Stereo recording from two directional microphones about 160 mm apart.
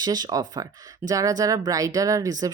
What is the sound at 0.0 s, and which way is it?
Speech, 25° right (ahead or behind).